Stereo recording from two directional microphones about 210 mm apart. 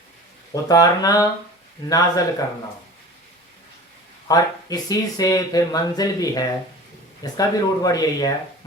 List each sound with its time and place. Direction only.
0.5 s speech: 15° left (ahead or behind)
4.3 s speech: 15° left (ahead or behind)